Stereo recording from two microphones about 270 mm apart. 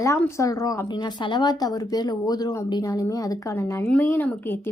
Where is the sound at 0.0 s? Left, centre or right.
Centre.